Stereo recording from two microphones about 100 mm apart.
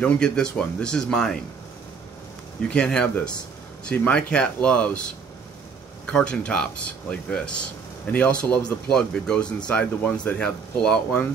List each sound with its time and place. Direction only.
0.0 s speech: 10° left (ahead or behind)
2.7 s speech: 10° left (ahead or behind)
6.0 s speech: 10° left (ahead or behind)